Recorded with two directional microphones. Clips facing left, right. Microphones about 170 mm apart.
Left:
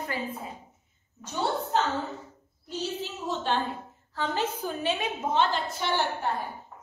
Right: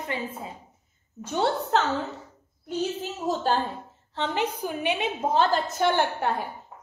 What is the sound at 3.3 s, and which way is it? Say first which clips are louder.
Speech: right 4 dB; 35° right (ahead or behind).